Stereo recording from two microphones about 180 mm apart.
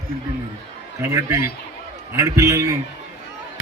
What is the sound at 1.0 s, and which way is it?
A man's voice, 15° right (ahead or behind).